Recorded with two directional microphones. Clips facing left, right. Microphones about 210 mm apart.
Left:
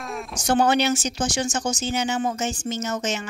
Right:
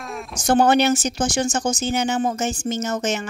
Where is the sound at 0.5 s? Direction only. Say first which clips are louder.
Right 4 dB; 50° right (ahead or behind).